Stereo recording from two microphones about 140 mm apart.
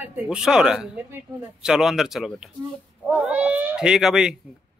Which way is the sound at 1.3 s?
30° right (ahead or behind).